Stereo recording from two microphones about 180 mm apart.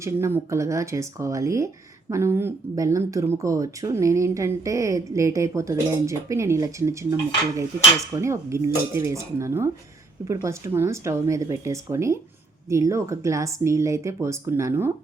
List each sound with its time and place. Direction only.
0.0 s speech: 15° right (ahead or behind)
8.2 s speech: 15° right (ahead or behind)